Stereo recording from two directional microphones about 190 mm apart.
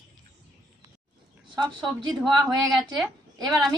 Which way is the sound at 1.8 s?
Centre (ahead or behind).